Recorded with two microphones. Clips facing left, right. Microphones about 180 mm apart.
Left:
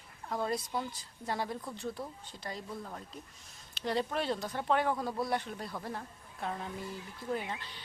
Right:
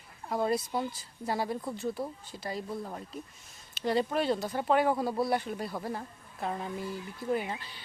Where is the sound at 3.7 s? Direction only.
Centre (ahead or behind).